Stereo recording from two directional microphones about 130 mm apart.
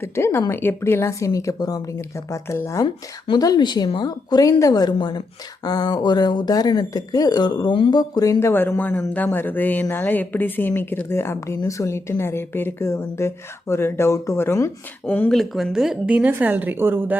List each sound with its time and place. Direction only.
0.0 s a woman's voice: 20° left (ahead or behind)
2.8 s a woman's voice: 35° left (ahead or behind); by 15.3 s 15° left (ahead or behind)
15.3 s a woman's voice: centre (ahead or behind); by 17.2 s 15° right (ahead or behind)